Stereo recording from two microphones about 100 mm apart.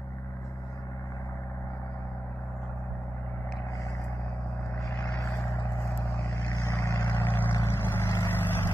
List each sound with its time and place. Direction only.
5.0 s vehicle: 30° left (ahead or behind)
6.6 s vehicle: 30° left (ahead or behind)